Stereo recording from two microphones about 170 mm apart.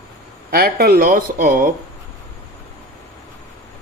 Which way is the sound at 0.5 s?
65° right (ahead or behind).